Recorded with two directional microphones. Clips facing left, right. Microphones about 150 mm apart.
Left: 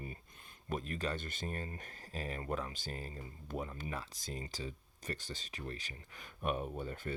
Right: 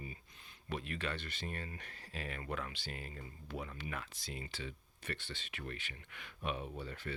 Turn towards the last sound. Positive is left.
turn(degrees=45)  # may be behind; listen again after turning